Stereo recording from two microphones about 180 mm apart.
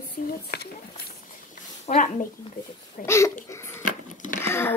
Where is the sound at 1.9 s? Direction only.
40° left (ahead or behind).